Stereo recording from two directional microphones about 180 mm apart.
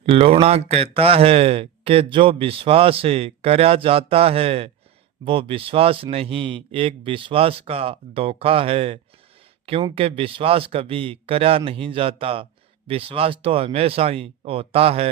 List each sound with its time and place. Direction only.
0.0 s speech: 35° right (ahead or behind)